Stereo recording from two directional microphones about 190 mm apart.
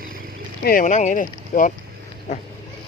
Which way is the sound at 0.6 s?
45° left (ahead or behind).